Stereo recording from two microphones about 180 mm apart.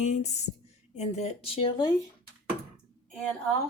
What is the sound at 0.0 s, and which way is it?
Speech, 40° left (ahead or behind).